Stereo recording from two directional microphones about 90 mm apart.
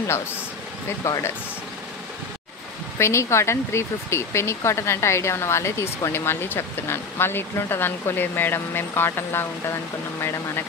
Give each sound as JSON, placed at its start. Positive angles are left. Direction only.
{"t": 0.8, "sound": "speech", "side_deg": 30}
{"t": 3.0, "sound": "speech", "side_deg": 30}